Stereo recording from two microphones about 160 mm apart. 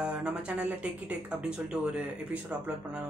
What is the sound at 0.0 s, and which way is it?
Speech, 5° right (ahead or behind).